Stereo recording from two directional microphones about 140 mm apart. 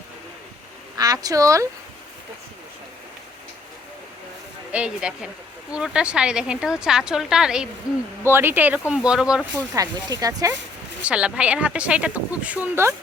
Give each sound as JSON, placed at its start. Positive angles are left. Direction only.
{"t": 0.9, "sound": "speech", "side_deg": -25}
{"t": 4.7, "sound": "a woman's voice", "side_deg": -5}
{"t": 8.2, "sound": "a woman's voice", "side_deg": -15}
{"t": 9.6, "sound": "speech", "side_deg": -25}
{"t": 11.0, "sound": "a woman's voice", "side_deg": -10}